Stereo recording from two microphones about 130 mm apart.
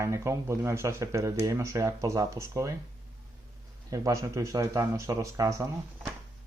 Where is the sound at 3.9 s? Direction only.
25° right (ahead or behind).